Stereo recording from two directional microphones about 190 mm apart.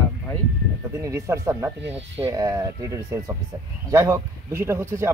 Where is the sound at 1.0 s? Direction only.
15° right (ahead or behind).